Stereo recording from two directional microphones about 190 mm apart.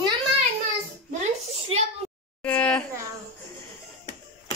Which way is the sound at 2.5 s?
5° left (ahead or behind).